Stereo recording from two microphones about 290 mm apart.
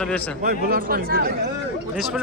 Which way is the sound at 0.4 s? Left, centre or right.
Right.